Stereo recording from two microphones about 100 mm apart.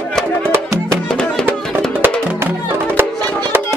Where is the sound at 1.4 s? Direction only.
20° right (ahead or behind).